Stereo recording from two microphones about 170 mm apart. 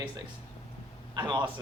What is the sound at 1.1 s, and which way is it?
Speech, 25° right (ahead or behind).